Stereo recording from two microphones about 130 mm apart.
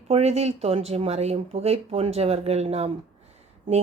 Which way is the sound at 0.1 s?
55° right (ahead or behind).